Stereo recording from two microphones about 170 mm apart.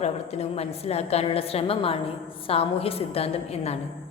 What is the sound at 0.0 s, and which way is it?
A woman's voice, 40° left (ahead or behind).